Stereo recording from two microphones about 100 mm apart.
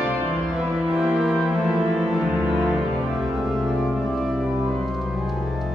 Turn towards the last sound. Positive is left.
turn(degrees=0)  # may be behind; listen again after turning